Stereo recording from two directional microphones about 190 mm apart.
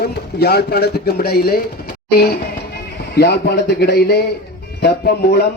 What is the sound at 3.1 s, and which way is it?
A man's voice, 60° left (ahead or behind).